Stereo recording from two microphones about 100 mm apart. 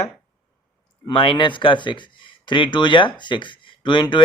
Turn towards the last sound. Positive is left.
turn(degrees=55)  # may be behind; listen again after turning